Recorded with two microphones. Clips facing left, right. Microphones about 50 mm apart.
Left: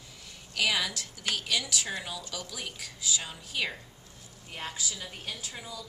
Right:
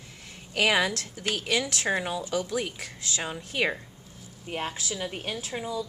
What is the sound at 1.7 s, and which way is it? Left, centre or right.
Speech, right.